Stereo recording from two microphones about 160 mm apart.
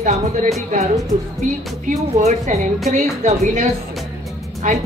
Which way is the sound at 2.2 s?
50° right (ahead or behind).